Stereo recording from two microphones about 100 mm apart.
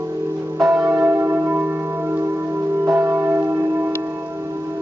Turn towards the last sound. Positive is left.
turn(degrees=-25)  # may be behind; listen again after turning